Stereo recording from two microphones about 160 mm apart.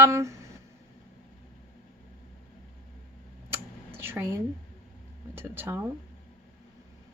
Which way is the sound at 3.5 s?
15° right (ahead or behind).